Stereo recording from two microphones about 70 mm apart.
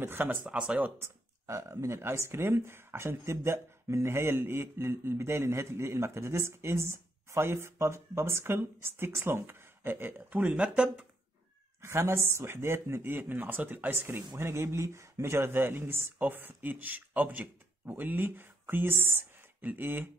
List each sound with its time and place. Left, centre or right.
0.0 s speech: right
0.9 s speech: right
10.4 s speech: centre
11.8 s speech: right
14.3 s speech: right